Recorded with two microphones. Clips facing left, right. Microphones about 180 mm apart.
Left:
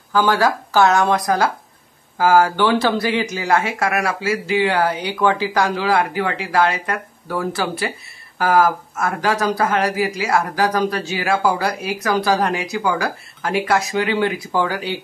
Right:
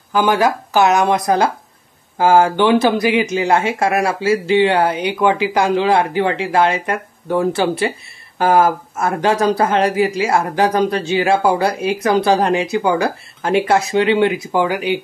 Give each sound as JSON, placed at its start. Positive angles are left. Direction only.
{"t": 0.1, "sound": "speech", "side_deg": -20}